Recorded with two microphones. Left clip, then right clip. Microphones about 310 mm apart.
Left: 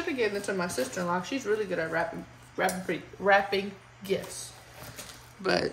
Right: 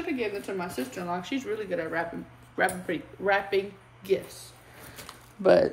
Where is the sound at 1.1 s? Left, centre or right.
Centre.